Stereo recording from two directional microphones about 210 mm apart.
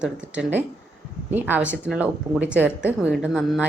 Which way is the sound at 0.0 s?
5° right (ahead or behind).